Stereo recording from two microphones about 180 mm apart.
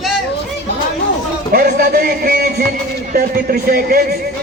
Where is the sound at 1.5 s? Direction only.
55° right (ahead or behind).